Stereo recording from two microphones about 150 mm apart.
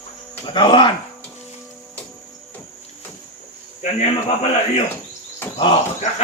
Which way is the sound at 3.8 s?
50° left (ahead or behind).